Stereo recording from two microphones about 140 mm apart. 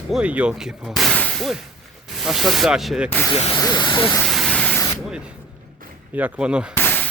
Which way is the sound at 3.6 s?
30° left (ahead or behind).